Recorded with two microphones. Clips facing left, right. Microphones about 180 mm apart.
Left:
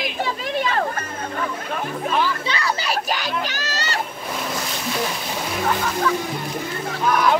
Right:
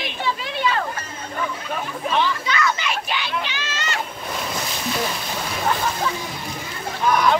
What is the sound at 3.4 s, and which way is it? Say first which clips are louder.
Music: left 2 dB; 40° left (ahead or behind).